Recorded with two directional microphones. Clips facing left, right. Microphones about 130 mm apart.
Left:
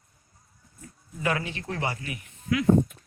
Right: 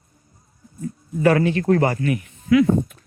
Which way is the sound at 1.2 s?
50° right (ahead or behind).